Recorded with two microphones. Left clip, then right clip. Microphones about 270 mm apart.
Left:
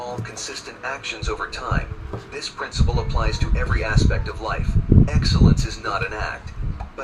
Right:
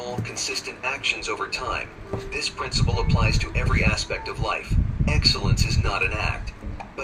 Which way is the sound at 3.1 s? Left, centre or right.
Centre.